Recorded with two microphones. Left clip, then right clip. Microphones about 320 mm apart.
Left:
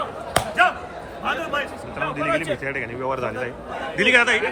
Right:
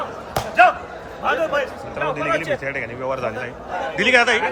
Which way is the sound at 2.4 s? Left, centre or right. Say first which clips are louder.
Right 2 dB; centre.